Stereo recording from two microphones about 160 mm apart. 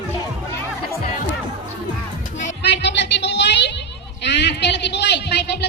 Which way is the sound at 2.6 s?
90° left.